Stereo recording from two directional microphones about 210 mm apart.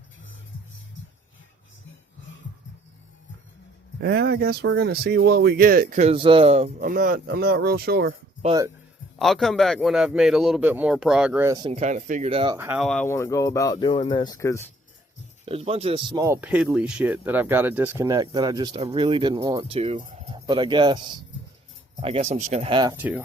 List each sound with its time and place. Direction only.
4.0 s speech: 50° right (ahead or behind)
6.1 s speech: 25° right (ahead or behind)
6.7 s speech: 40° right (ahead or behind)
9.1 s a man's voice: centre (ahead or behind)
11.5 s speech: 25° right (ahead or behind)
12.5 s speech: 10° right (ahead or behind)
12.8 s speech: 5° left (ahead or behind)
15.4 s speech: 25° right (ahead or behind)
20.3 s speech: 20° right (ahead or behind)
23.0 s speech: 10° right (ahead or behind)